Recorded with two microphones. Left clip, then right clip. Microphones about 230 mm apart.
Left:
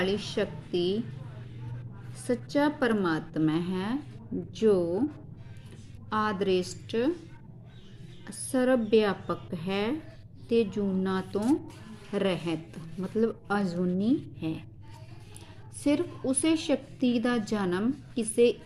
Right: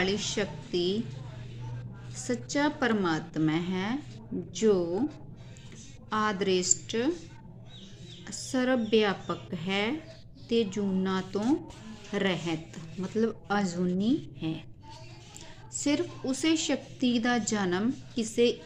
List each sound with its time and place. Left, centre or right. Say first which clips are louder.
0.0 s a woman's voice: even; centre
2.2 s a woman's voice: left 2 dB; centre
6.1 s a woman's voice: even; centre
8.5 s a woman's voice: left 2 dB; centre
15.8 s a woman's voice: left 2 dB; centre